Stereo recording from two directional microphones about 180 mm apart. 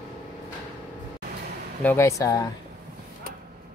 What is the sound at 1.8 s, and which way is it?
Speech, 10° left (ahead or behind).